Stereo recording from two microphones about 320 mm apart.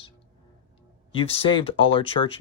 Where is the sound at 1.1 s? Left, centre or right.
Centre.